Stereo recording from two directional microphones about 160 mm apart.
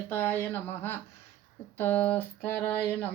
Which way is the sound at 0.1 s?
10° left (ahead or behind).